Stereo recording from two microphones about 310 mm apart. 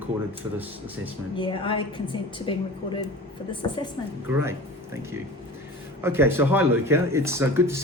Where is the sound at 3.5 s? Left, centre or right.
Centre.